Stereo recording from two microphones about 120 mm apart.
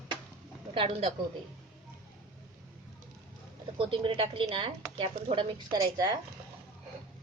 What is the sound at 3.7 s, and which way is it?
Speech, 45° right (ahead or behind).